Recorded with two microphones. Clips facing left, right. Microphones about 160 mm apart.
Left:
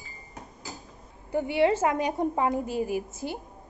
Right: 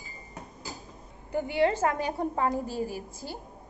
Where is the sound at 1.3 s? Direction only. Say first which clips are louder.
Left 2 dB; 25° left (ahead or behind).